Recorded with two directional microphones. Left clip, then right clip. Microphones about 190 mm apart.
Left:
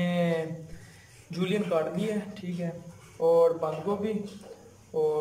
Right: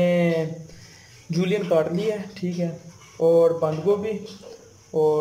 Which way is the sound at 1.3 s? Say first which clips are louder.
Right 7 dB; 30° right (ahead or behind).